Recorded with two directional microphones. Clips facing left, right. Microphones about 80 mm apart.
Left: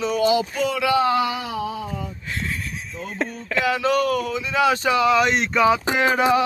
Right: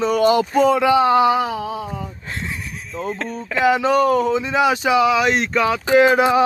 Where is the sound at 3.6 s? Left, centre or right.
Right; by 5.8 s centre.